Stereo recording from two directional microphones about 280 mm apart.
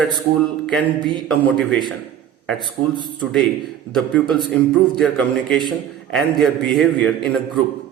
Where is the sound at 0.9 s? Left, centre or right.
Centre.